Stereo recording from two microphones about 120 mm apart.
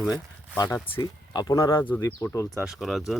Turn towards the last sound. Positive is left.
turn(degrees=0)  # may be behind; listen again after turning